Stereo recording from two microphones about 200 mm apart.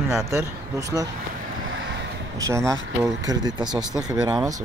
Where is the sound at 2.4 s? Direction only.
15° right (ahead or behind).